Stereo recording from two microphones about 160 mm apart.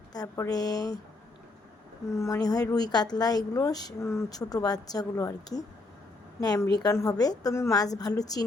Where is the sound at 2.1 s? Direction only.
20° left (ahead or behind).